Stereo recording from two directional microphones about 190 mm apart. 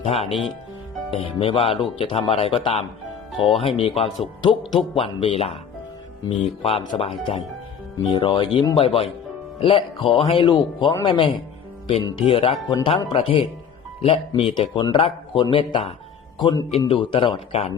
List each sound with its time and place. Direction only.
0.0 s a man's voice: 30° left (ahead or behind)